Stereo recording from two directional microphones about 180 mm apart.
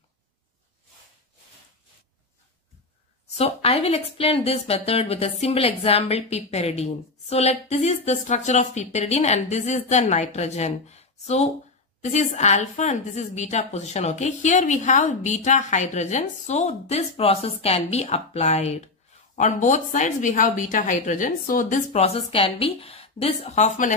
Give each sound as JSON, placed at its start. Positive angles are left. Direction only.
{"t": 3.3, "sound": "speech", "side_deg": 35}